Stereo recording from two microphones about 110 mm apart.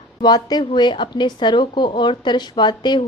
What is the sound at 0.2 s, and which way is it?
A woman's voice, 40° left (ahead or behind).